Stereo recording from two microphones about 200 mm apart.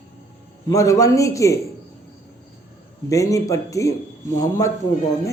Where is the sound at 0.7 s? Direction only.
15° left (ahead or behind).